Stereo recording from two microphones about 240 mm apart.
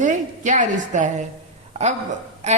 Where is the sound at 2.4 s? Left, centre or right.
Right.